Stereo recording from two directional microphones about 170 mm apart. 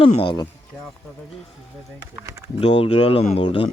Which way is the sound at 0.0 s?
35° left (ahead or behind).